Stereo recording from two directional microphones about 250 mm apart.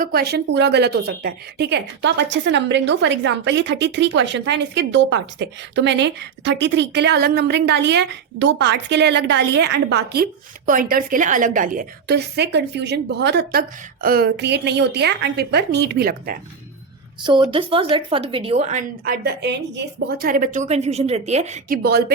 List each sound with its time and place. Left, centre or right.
0.0 s a woman's voice: right
17.5 s a woman's voice: right